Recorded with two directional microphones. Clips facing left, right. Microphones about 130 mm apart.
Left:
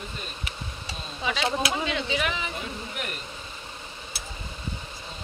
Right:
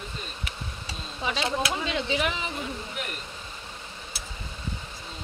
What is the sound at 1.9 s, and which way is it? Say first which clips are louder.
Speech: right 1 dB; 30° right (ahead or behind).